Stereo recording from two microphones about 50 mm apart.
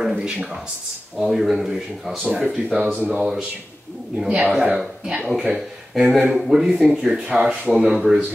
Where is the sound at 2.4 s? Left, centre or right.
Right.